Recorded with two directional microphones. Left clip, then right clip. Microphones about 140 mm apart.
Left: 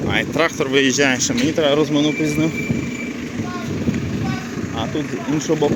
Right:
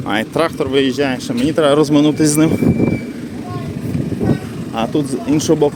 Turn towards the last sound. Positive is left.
turn(degrees=-90)